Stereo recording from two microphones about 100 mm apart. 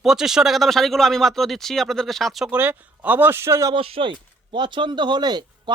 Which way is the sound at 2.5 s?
15° right (ahead or behind).